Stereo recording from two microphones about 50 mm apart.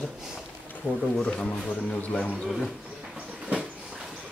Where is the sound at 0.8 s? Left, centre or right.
Centre.